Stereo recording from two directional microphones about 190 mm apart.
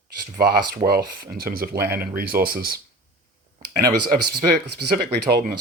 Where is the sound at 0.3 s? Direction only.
55° right (ahead or behind).